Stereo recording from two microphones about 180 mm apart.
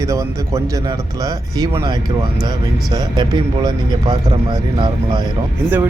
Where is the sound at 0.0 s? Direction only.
15° right (ahead or behind).